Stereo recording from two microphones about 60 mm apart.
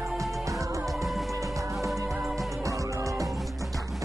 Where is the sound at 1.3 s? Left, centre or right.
Right.